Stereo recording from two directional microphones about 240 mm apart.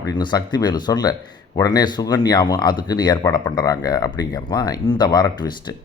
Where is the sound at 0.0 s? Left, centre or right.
Centre.